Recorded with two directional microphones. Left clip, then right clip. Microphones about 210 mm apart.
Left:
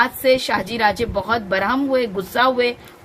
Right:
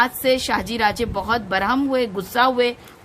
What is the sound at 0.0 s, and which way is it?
A woman's voice, 55° right (ahead or behind).